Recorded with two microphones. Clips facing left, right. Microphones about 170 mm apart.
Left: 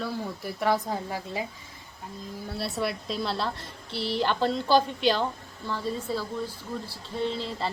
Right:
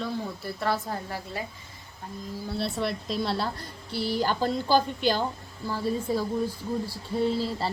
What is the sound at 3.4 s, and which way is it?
Speech, 25° left (ahead or behind).